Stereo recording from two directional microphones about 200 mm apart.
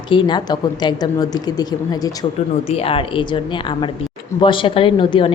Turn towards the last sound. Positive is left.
turn(degrees=25)  # may be behind; listen again after turning